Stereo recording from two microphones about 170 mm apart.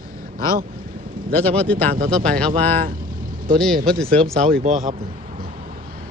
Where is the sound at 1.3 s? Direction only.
10° left (ahead or behind).